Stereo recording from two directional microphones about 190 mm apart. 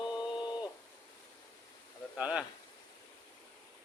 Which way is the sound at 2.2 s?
5° right (ahead or behind).